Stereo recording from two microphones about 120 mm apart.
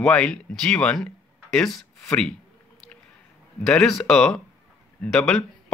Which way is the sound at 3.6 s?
5° left (ahead or behind).